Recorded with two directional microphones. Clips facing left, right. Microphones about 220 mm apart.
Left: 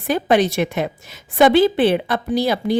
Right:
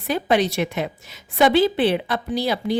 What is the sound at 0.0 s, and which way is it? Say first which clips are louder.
A woman's voice: left 3 dB; 50° left (ahead or behind).